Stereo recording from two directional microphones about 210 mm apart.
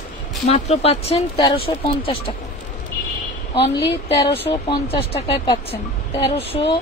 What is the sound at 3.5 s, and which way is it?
Speech, 30° left (ahead or behind).